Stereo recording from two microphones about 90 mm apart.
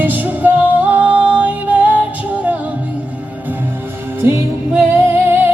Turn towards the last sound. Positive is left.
turn(degrees=-25)  # may be behind; listen again after turning